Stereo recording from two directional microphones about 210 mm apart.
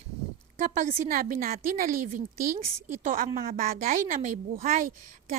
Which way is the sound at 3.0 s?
40° right (ahead or behind).